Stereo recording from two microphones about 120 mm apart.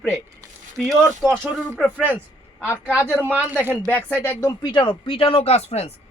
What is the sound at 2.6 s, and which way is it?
Speech, 20° left (ahead or behind).